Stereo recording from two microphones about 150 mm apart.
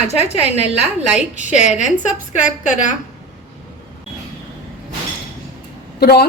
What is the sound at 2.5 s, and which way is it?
Speech, 55° left (ahead or behind).